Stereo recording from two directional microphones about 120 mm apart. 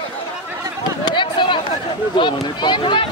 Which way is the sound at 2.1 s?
40° left (ahead or behind).